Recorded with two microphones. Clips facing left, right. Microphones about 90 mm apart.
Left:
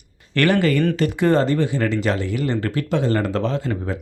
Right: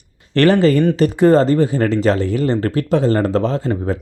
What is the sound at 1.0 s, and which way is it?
Speech, 30° right (ahead or behind).